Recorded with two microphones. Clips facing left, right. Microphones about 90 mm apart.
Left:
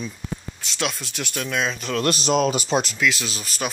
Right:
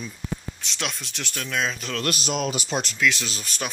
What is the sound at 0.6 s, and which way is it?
Speech, 5° left (ahead or behind).